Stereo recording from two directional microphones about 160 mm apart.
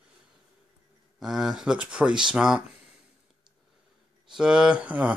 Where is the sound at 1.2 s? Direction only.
Centre (ahead or behind).